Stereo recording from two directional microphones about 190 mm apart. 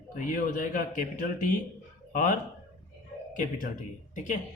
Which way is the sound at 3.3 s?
45° left (ahead or behind).